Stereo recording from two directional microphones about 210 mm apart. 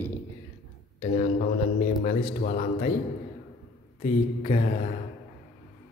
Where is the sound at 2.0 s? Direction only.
35° left (ahead or behind).